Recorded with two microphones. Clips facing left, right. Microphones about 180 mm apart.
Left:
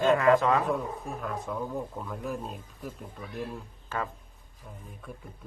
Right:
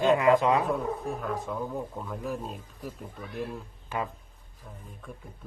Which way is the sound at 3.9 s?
15° right (ahead or behind).